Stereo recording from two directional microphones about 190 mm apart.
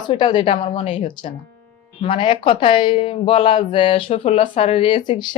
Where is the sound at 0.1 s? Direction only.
25° left (ahead or behind).